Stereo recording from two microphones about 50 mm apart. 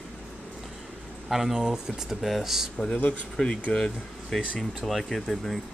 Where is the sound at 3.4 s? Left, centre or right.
Centre.